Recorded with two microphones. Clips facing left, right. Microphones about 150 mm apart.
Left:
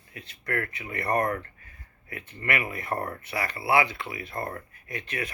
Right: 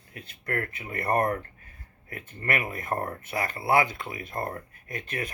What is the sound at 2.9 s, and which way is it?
Speech, 25° right (ahead or behind).